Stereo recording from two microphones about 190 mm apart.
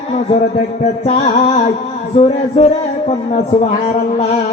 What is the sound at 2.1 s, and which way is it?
Speech, 30° left (ahead or behind).